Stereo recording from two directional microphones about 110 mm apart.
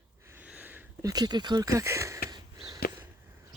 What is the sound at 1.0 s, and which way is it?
Speech, 35° right (ahead or behind).